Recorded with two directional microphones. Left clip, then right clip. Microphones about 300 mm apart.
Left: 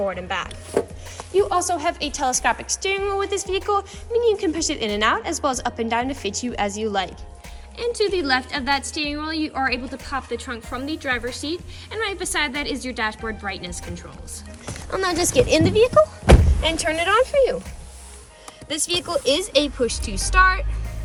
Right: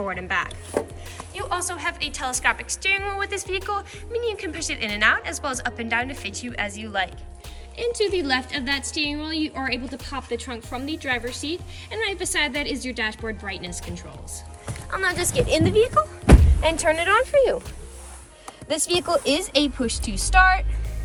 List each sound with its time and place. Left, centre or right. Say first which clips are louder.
0.1 s a woman's voice: right 1 dB; centre
7.8 s a woman's voice: left 1 dB; centre
14.8 s a woman's voice: left 2 dB; centre
16.3 s speech: left 2 dB; centre
18.7 s a woman's voice: right 2 dB; centre